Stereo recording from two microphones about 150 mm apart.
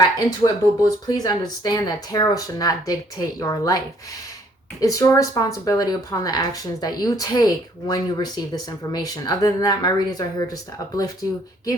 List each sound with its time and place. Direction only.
0.0 s speech: 25° left (ahead or behind)
4.8 s speech: 25° left (ahead or behind)